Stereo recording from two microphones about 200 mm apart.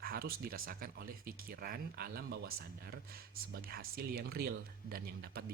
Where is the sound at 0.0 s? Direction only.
45° right (ahead or behind).